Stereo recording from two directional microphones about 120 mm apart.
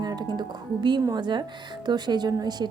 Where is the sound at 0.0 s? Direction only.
35° right (ahead or behind).